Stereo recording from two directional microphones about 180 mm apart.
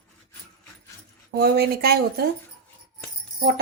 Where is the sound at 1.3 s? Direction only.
65° right (ahead or behind).